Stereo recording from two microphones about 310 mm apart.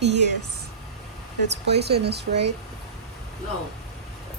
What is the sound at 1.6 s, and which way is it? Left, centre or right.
Speech, right.